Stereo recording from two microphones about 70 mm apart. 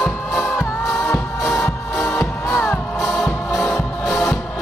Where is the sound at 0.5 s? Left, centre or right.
Left.